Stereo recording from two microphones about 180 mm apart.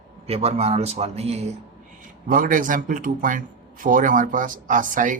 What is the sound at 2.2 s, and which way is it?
A man's voice, 50° right (ahead or behind).